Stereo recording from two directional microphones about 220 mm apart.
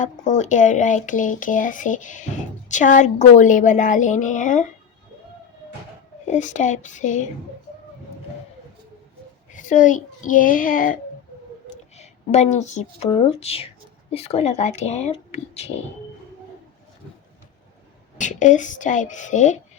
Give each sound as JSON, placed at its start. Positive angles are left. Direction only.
{"t": 0.0, "sound": "speech", "side_deg": 35}
{"t": 6.2, "sound": "speech", "side_deg": 35}
{"t": 9.5, "sound": "speech", "side_deg": 35}
{"t": 11.9, "sound": "speech", "side_deg": 30}
{"t": 18.2, "sound": "speech", "side_deg": 35}